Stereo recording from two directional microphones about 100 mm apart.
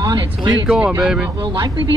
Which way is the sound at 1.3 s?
55° right (ahead or behind).